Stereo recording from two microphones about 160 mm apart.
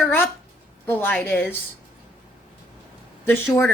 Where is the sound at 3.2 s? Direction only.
15° left (ahead or behind).